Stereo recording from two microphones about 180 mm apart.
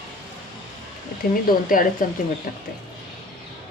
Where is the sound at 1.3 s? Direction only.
50° left (ahead or behind).